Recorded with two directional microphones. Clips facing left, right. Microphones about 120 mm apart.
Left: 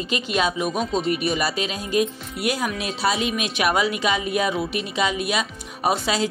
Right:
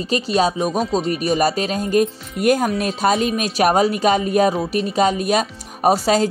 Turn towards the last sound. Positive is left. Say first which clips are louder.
# right 6 dB
turn(degrees=-40)  # may be behind; listen again after turning